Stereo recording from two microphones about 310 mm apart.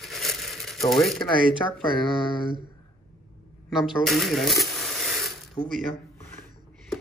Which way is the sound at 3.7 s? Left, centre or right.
Centre.